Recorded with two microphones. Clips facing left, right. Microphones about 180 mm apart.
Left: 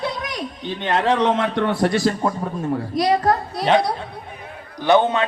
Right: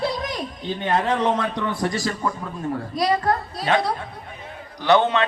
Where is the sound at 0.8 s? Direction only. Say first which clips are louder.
Left 3 dB; 85° left; by 2.1 s 65° left (ahead or behind).